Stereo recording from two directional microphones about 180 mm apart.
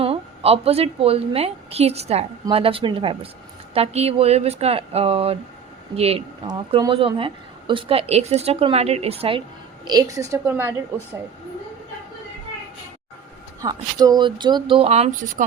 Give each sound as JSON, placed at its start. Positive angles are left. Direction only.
{"t": 0.0, "sound": "a woman's voice", "side_deg": -35}
{"t": 9.8, "sound": "speech", "side_deg": -20}
{"t": 13.6, "sound": "speech", "side_deg": -20}